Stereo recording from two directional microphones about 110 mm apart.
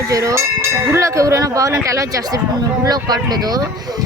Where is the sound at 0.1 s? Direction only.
30° right (ahead or behind).